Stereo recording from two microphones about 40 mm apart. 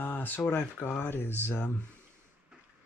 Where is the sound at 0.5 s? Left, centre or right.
Left.